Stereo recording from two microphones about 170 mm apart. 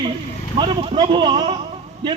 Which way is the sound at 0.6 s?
30° right (ahead or behind).